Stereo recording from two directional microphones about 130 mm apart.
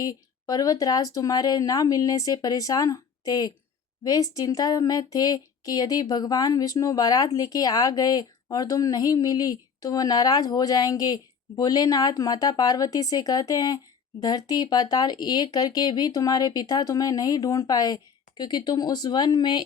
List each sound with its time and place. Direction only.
0.0 s a woman's voice: 30° left (ahead or behind)